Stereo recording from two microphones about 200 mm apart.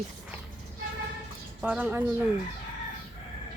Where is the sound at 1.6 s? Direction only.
10° right (ahead or behind).